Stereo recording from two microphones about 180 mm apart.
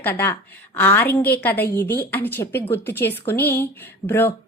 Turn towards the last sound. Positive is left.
turn(degrees=10)  # may be behind; listen again after turning